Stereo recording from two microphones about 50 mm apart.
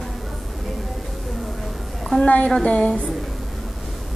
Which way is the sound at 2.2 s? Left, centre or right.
Left.